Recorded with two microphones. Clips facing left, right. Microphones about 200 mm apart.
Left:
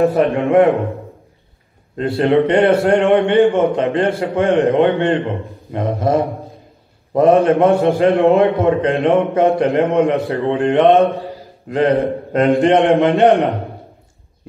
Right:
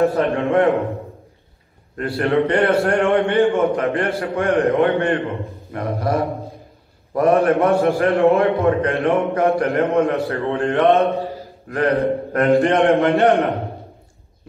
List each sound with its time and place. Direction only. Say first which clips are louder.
0.0 s a man's voice: left 3 dB; 15° left (ahead or behind)
2.0 s a man's voice: left 4 dB; 25° left (ahead or behind)